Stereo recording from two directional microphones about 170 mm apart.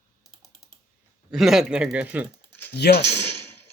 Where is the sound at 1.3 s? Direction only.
Centre (ahead or behind).